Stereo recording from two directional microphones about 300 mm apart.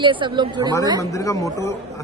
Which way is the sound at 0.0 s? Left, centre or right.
Centre.